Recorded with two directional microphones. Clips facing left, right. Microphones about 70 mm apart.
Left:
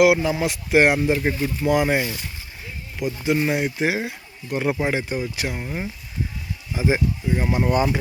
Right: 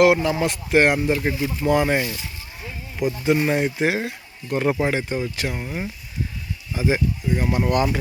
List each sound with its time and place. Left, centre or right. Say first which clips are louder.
0.0 s speech: even; centre
3.2 s speech: right 1 dB; centre
6.7 s speech: even; centre